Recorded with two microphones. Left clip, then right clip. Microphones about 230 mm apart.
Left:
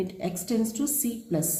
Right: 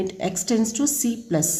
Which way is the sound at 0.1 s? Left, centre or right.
Right.